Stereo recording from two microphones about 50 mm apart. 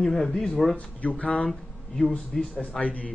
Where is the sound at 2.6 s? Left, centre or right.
Left.